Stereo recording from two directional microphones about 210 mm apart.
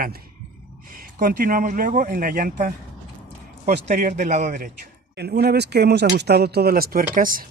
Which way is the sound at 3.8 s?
35° right (ahead or behind).